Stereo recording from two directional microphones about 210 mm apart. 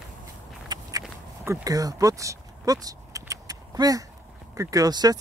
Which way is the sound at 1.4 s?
15° right (ahead or behind).